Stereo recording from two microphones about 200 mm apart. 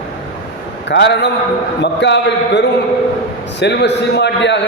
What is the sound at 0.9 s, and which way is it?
A man's voice, 60° left (ahead or behind).